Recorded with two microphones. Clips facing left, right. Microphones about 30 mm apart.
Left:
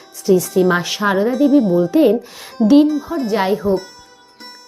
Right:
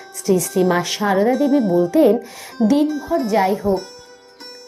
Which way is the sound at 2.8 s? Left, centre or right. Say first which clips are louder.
Left 1 dB; centre.